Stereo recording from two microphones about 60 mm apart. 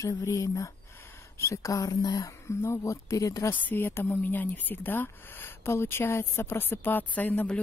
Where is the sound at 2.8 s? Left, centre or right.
Left.